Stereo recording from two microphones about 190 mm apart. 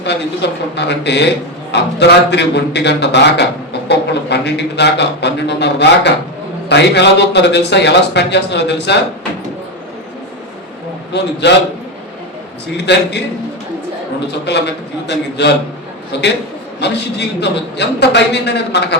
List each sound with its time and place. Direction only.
0.4 s a man's voice: 65° left (ahead or behind)
11.1 s a man's voice: 65° left (ahead or behind)
12.7 s a man's voice: 60° left (ahead or behind)
14.5 s a man's voice: 60° left (ahead or behind)